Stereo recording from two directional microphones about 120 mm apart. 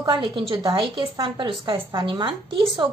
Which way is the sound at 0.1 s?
45° right (ahead or behind).